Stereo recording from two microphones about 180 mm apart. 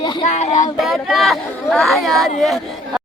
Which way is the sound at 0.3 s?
40° left (ahead or behind).